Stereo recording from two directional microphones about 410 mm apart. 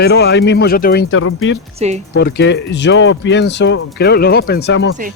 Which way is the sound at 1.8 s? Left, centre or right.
Centre.